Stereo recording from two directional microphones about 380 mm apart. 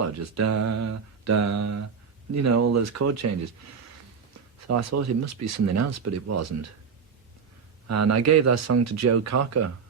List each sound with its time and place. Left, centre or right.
0.2 s speech: right
4.7 s speech: right
7.9 s speech: right